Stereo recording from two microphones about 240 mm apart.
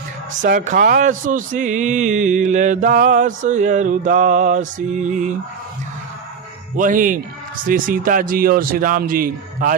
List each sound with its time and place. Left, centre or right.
0.4 s speech: right
6.7 s speech: right